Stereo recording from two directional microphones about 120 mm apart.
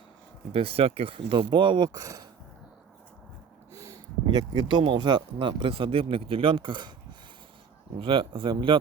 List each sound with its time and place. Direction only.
0.5 s speech: 55° right (ahead or behind); by 2.2 s 30° right (ahead or behind)
3.8 s speech: 30° right (ahead or behind)
8.0 s speech: 45° right (ahead or behind)